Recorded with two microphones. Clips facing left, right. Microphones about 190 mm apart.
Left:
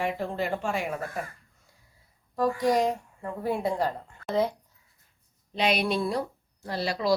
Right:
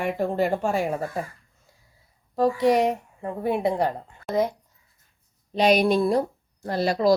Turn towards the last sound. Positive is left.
turn(degrees=-45)  # may be behind; listen again after turning